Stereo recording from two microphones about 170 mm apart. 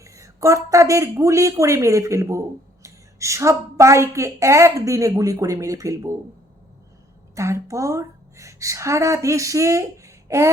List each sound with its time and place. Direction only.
0.0 s speech: 20° right (ahead or behind)
7.3 s a woman's voice: 15° right (ahead or behind)